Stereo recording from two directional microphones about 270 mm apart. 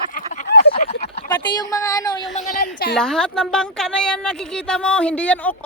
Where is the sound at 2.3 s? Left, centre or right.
Left.